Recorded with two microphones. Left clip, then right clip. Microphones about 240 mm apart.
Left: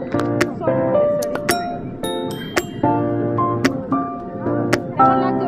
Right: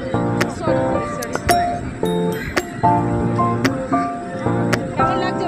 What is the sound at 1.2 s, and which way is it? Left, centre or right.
Music, centre.